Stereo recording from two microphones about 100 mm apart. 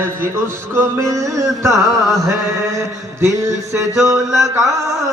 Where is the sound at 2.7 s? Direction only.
30° right (ahead or behind).